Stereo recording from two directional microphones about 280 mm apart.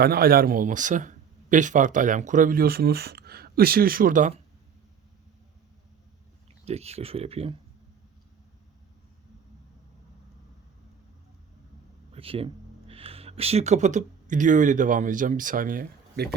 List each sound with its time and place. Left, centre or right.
0.0 s speech: right
6.7 s speech: right
12.1 s speech: centre